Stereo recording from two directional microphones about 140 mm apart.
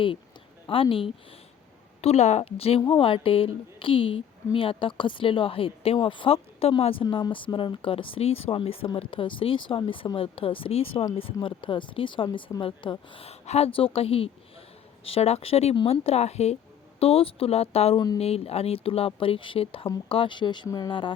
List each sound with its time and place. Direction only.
0.7 s a woman's voice: 40° left (ahead or behind)
2.0 s a woman's voice: 50° left (ahead or behind)
17.9 s speech: 25° left (ahead or behind)
18.2 s a woman's voice: 45° left (ahead or behind)